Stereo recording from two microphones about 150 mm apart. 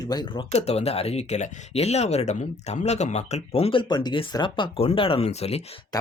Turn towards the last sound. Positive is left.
turn(degrees=45)  # may be behind; listen again after turning